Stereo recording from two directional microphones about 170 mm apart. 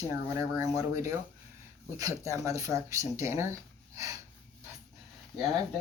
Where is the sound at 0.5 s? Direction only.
20° right (ahead or behind).